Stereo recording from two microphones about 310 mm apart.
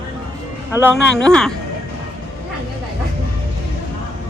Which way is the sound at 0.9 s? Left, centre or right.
Centre.